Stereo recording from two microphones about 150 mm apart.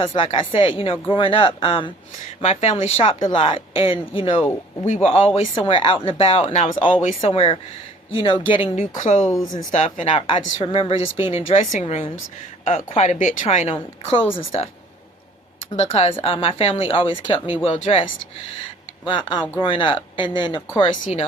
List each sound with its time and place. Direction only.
0.0 s speech: 40° left (ahead or behind)
8.7 s speech: 50° left (ahead or behind)
9.3 s speech: 25° left (ahead or behind)
9.7 s speech: 45° left (ahead or behind)
14.0 s speech: 35° left (ahead or behind)
15.7 s speech: 45° left (ahead or behind)
19.0 s speech: 35° left (ahead or behind)
20.9 s speech: 55° left (ahead or behind)